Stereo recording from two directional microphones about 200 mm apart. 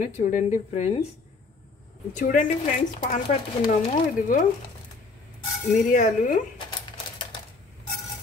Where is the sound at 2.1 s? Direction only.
40° left (ahead or behind).